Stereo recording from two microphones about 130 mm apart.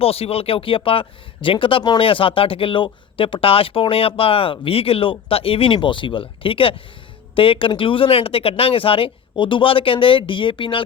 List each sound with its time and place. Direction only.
0.0 s speech: 50° left (ahead or behind)